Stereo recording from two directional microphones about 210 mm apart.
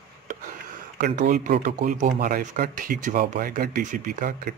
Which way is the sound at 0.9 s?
40° right (ahead or behind).